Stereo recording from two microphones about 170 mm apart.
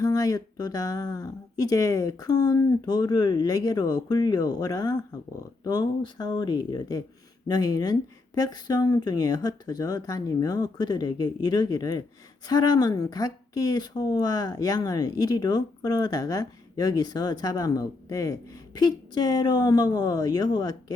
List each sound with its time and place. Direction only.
0.0 s speech: 20° left (ahead or behind)